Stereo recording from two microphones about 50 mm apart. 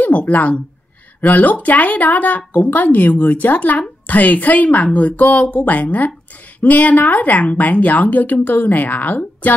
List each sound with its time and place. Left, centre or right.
0.0 s speech: left